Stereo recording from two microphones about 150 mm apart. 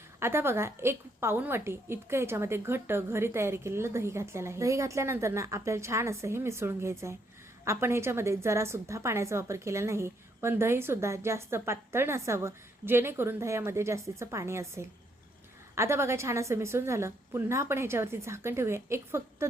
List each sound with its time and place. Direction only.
0.2 s a woman's voice: 15° right (ahead or behind)